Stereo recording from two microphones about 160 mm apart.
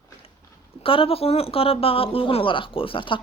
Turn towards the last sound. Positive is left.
turn(degrees=30)  # may be behind; listen again after turning